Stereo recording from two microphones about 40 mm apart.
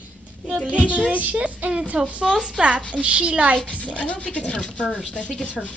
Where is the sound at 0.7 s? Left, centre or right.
Right.